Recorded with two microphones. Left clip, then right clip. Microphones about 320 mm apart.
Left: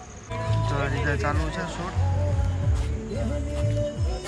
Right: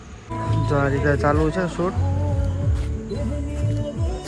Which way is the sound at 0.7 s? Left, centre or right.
Centre.